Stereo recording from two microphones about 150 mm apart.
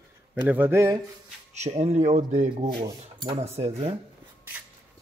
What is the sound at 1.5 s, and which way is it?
Speech, 45° right (ahead or behind).